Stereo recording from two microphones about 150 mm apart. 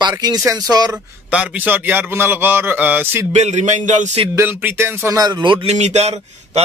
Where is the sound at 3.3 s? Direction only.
50° right (ahead or behind).